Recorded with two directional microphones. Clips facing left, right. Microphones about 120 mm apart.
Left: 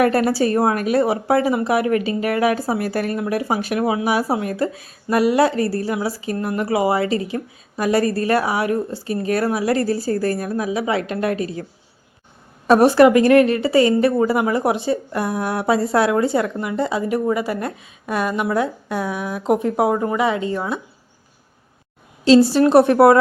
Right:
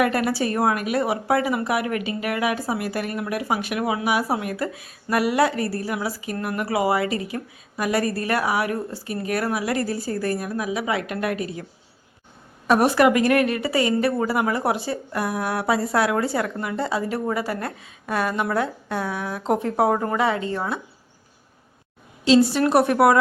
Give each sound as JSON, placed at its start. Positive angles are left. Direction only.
{"t": 0.0, "sound": "speech", "side_deg": 35}
{"t": 12.6, "sound": "speech", "side_deg": 30}
{"t": 22.4, "sound": "speech", "side_deg": 30}